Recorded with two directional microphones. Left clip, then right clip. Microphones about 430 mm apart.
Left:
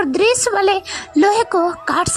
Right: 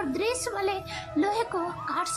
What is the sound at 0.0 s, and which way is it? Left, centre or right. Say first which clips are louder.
A woman's voice: left 14 dB; centre.